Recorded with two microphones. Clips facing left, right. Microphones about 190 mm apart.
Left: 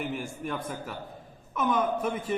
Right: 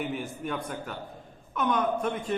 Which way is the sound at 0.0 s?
Centre (ahead or behind).